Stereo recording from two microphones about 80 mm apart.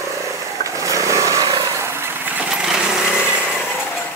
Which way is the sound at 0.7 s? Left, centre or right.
Right.